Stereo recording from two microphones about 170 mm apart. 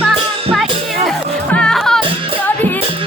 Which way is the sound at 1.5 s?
5° left (ahead or behind).